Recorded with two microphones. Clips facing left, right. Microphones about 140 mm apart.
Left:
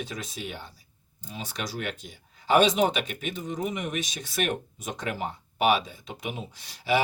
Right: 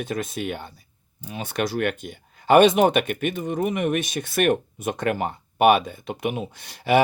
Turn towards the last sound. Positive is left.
turn(degrees=-55)  # may be behind; listen again after turning